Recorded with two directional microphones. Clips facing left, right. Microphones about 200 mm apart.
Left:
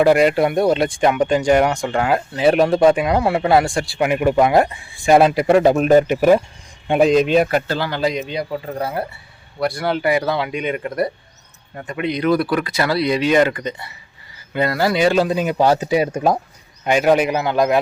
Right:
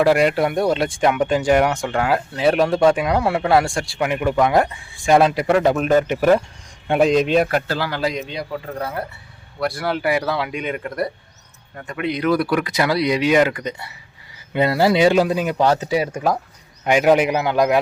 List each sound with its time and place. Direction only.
0.0 s speech: centre (ahead or behind)
6.8 s speech: centre (ahead or behind)
8.4 s speech: 10° left (ahead or behind); by 13.9 s 10° right (ahead or behind)
14.5 s speech: 25° right (ahead or behind)
15.3 s speech: centre (ahead or behind); by 16.4 s 20° left (ahead or behind)
16.8 s speech: 15° right (ahead or behind)